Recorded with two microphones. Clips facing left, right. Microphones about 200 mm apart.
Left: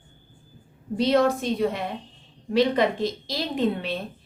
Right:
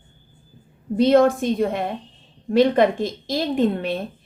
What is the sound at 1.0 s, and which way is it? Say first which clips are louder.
A woman's voice: right 5 dB; 50° right (ahead or behind).